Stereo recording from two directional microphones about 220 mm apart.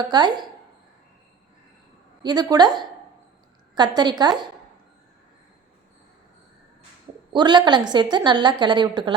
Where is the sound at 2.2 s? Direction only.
20° right (ahead or behind).